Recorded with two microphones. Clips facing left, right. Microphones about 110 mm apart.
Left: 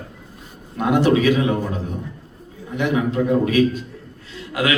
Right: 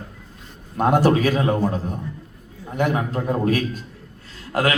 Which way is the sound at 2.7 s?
45° right (ahead or behind).